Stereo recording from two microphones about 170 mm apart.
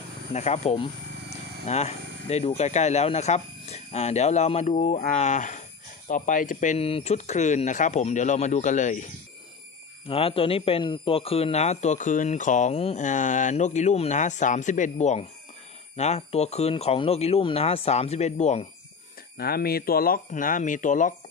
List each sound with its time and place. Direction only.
0.3 s a man's voice: 40° left (ahead or behind)
10.0 s a man's voice: 35° left (ahead or behind)
19.3 s speech: 65° left (ahead or behind); by 21.1 s 50° left (ahead or behind)